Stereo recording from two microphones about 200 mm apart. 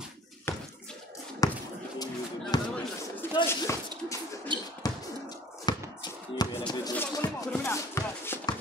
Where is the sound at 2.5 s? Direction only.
20° left (ahead or behind).